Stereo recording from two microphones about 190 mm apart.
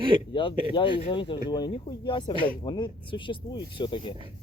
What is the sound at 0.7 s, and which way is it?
Speech, 25° left (ahead or behind).